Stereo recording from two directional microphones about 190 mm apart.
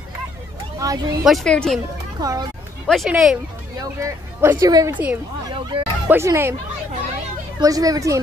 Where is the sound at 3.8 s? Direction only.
15° right (ahead or behind).